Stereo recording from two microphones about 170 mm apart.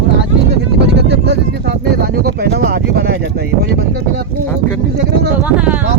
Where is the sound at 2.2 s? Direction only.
65° right (ahead or behind).